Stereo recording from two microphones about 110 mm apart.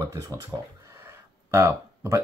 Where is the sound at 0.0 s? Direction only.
30° right (ahead or behind).